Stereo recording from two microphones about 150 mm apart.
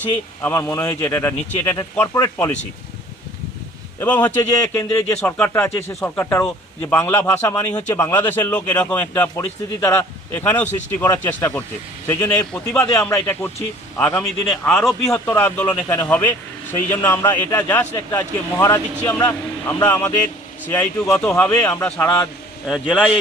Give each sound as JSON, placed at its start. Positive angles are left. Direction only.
{"t": 0.4, "sound": "a man's voice", "side_deg": 15}
{"t": 4.0, "sound": "a man's voice", "side_deg": 10}
{"t": 4.6, "sound": "a man's voice", "side_deg": 20}
{"t": 14.7, "sound": "a man's voice", "side_deg": 0}
{"t": 15.3, "sound": "a man's voice", "side_deg": 15}
{"t": 22.6, "sound": "a man's voice", "side_deg": -5}